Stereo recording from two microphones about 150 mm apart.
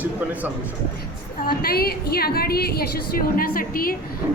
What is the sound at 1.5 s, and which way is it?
A woman's voice, 90° left.